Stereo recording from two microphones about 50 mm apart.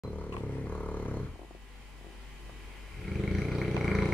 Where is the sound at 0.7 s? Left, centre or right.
Left.